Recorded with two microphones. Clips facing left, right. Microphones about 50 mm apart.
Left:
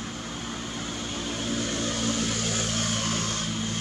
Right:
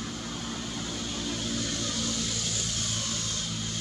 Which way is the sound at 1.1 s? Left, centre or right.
Left.